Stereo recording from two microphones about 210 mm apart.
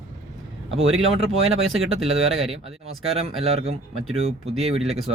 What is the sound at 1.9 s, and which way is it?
Speech, 30° right (ahead or behind).